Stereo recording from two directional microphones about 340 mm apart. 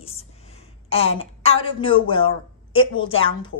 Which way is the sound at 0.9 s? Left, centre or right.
Centre.